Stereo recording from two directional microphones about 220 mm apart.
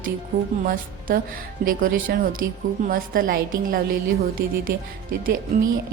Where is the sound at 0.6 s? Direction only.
40° right (ahead or behind).